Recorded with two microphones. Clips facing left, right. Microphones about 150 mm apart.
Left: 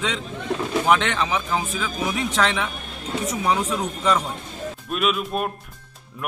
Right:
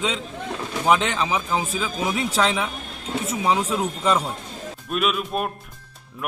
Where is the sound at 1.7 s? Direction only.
30° right (ahead or behind).